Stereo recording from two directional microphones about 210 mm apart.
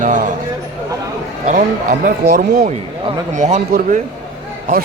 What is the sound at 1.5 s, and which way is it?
Speech, 40° right (ahead or behind).